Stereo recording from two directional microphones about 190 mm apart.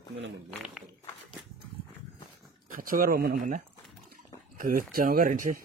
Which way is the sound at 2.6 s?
45° right (ahead or behind).